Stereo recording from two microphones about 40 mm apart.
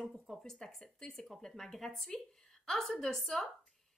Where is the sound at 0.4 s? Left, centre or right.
Centre.